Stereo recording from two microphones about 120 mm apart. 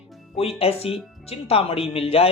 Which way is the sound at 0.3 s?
55° left (ahead or behind).